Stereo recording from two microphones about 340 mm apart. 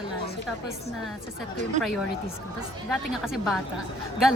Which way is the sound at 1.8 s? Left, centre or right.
Right.